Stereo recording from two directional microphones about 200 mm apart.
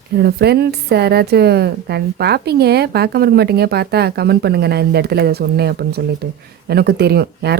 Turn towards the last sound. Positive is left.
turn(degrees=-55)  # may be behind; listen again after turning